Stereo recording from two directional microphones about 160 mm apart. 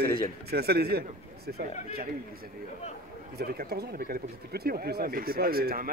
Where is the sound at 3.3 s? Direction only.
75° right (ahead or behind).